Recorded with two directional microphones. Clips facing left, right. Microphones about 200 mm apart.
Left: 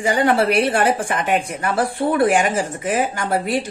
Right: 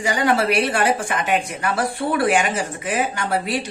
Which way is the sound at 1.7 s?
50° left (ahead or behind).